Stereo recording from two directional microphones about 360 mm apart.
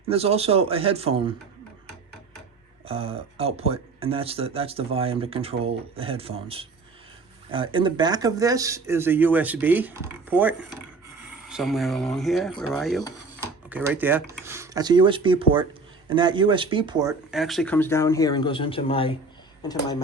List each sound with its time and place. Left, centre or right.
0.1 s speech: centre
2.8 s speech: centre